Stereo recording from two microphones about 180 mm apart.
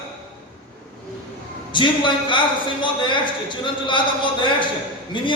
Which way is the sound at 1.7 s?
25° left (ahead or behind).